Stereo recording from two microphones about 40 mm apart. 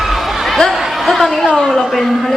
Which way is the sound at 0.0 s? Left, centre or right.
Centre.